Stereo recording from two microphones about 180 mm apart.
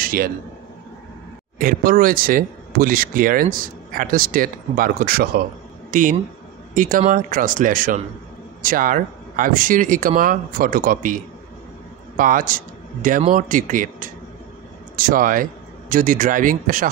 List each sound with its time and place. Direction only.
0.0 s a sound: 55° right (ahead or behind)
1.6 s speech: 50° right (ahead or behind)
12.2 s a man's voice: 50° right (ahead or behind)